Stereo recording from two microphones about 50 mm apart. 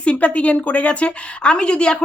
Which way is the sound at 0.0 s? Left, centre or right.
Left.